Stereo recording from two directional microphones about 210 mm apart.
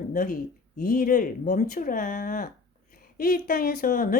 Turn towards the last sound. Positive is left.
turn(degrees=40)  # may be behind; listen again after turning